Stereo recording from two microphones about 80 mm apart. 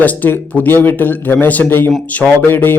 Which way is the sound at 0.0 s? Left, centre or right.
Left.